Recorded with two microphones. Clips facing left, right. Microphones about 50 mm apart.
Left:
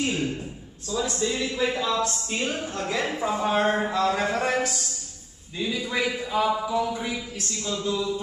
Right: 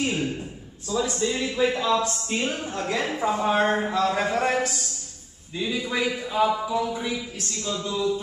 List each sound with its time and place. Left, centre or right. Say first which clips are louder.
0.0 s a sound: right 1 dB; centre
0.8 s a man's voice: right 1 dB; centre
2.0 s a man's voice: right 1 dB; centre
2.8 s a man's voice: right 2 dB; centre
4.1 s speech: right 1 dB; centre